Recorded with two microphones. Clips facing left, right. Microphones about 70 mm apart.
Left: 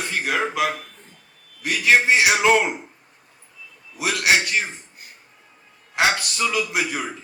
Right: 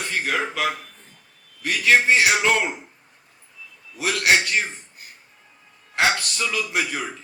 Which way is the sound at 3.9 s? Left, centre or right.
Centre.